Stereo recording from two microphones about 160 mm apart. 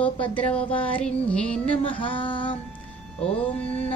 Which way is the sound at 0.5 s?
35° left (ahead or behind).